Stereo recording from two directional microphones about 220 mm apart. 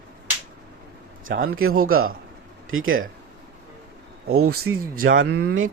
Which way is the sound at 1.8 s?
70° right (ahead or behind).